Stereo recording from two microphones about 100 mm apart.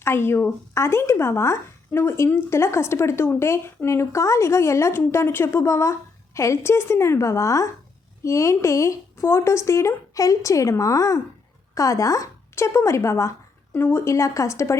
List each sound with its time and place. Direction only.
0.0 s a woman's voice: 25° left (ahead or behind)